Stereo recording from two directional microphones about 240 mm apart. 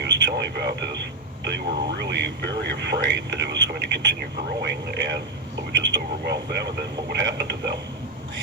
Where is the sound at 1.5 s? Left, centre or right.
Right.